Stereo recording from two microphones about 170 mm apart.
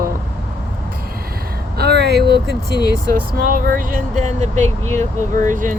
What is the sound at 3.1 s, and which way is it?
Speech, 60° right (ahead or behind).